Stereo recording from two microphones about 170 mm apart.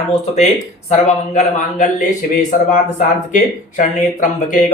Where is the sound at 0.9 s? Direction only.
45° left (ahead or behind).